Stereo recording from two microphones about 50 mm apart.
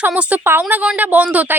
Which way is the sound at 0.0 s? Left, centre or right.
Right.